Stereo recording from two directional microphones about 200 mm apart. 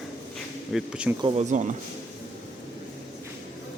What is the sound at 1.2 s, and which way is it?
Speech, 35° right (ahead or behind).